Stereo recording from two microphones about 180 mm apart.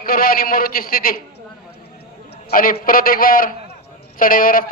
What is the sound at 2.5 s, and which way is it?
A man's voice, 50° left (ahead or behind).